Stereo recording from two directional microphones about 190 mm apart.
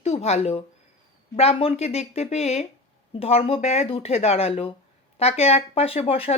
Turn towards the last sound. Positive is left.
turn(degrees=30)  # may be behind; listen again after turning